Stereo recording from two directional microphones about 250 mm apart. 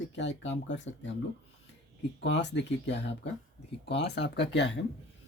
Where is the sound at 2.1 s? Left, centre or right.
Left.